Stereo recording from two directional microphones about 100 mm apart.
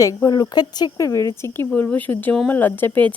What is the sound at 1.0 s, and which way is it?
Speech, 30° left (ahead or behind).